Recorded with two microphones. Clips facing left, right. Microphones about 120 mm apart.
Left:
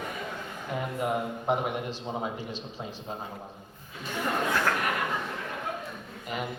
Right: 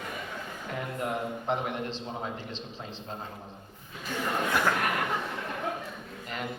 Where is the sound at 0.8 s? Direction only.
15° left (ahead or behind).